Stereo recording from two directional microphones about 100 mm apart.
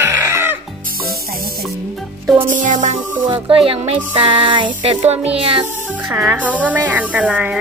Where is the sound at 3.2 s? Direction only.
65° right (ahead or behind); by 5.6 s 85° right.